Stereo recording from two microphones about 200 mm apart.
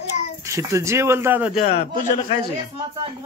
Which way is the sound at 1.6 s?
35° left (ahead or behind).